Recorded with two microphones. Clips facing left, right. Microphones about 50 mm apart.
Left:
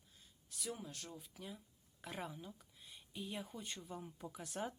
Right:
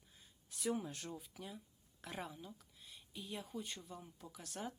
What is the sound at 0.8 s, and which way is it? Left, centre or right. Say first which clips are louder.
Speech: right 5 dB; centre.